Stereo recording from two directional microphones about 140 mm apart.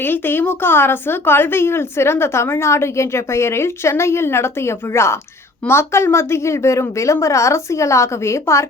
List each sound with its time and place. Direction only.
0.0 s a woman's voice: 15° left (ahead or behind)